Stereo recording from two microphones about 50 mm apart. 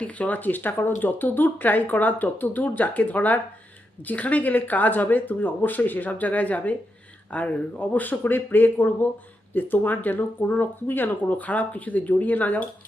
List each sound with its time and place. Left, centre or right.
0.0 s speech: left